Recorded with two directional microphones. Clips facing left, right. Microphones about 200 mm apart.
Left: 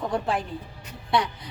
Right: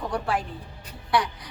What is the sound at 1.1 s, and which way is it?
Speech, 20° left (ahead or behind).